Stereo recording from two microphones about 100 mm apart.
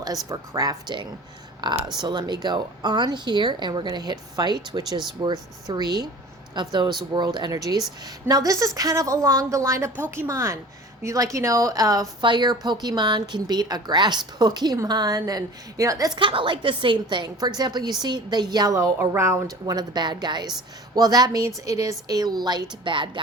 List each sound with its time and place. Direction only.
0.3 s a woman's voice: 35° right (ahead or behind)
1.6 s a woman's voice: 45° right (ahead or behind)
12.2 s a woman's voice: 50° right (ahead or behind); by 16.1 s 35° right (ahead or behind)
16.1 s speech: 55° right (ahead or behind); by 18.9 s 35° right (ahead or behind)
18.9 s speech: 25° right (ahead or behind)
19.6 s a woman's voice: 45° right (ahead or behind)
22.8 s a woman's voice: 55° right (ahead or behind)